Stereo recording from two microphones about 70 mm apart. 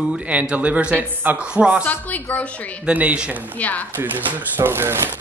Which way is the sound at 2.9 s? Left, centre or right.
Right.